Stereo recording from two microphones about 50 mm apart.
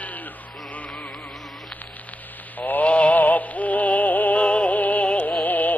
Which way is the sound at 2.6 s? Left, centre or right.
Left.